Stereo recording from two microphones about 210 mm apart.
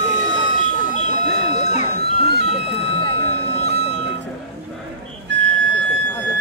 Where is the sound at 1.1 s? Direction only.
35° left (ahead or behind).